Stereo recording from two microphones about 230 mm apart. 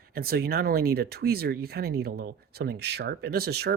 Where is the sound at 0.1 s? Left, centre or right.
Right.